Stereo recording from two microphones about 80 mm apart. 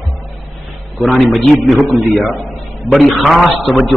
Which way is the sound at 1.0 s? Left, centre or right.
Centre.